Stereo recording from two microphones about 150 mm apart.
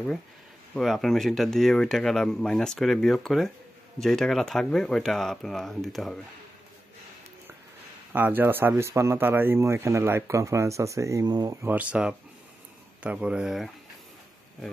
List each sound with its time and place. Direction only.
0.7 s speech: centre (ahead or behind)
8.1 s speech: 15° right (ahead or behind)